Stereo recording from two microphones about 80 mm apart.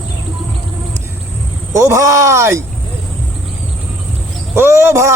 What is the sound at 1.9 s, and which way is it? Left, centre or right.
Music, right.